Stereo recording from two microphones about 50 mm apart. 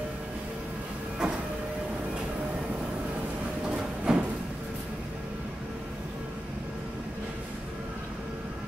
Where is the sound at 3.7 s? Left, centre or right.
Right.